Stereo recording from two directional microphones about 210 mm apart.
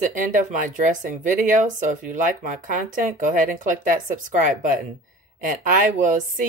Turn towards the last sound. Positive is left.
turn(degrees=-40)  # may be behind; listen again after turning